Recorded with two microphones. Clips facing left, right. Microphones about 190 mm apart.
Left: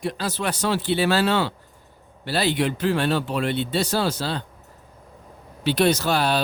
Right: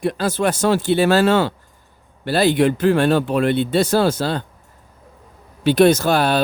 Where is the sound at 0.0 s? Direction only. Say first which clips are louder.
Right 7 dB; 50° right (ahead or behind).